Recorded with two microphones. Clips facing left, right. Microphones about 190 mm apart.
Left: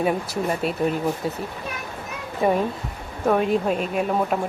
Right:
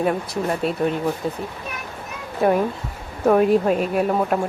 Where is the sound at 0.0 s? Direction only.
5° left (ahead or behind).